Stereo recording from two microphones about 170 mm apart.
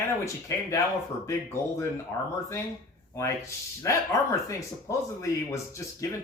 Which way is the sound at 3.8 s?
20° left (ahead or behind).